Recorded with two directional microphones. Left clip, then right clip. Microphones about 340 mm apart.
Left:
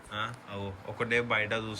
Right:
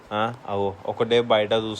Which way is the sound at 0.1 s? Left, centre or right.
Centre.